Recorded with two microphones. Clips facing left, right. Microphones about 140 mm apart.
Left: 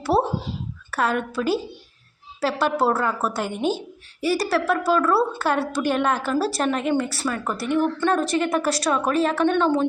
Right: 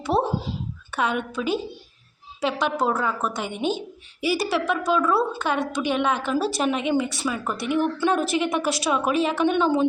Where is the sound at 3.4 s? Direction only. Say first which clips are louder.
Left 2 dB; 45° left (ahead or behind).